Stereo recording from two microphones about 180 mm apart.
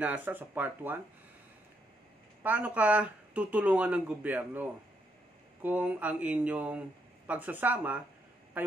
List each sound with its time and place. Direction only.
0.0 s speech: 10° right (ahead or behind)
2.4 s a man's voice: 10° right (ahead or behind)